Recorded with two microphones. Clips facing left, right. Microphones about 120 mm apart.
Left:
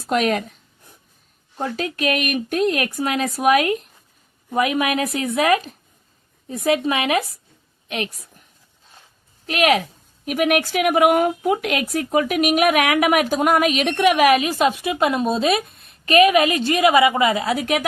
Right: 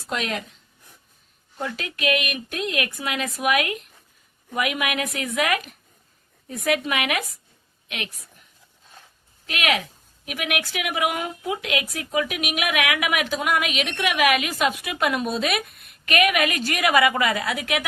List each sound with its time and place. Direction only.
0.0 s speech: 50° left (ahead or behind)
1.5 s speech: 35° left (ahead or behind)
9.5 s speech: 35° left (ahead or behind)